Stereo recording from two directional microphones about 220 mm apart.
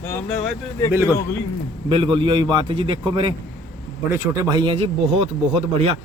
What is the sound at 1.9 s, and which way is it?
Speech, 20° right (ahead or behind).